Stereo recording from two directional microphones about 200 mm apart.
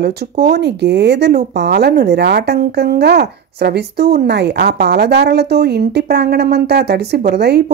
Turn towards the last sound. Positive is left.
turn(degrees=-55)  # may be behind; listen again after turning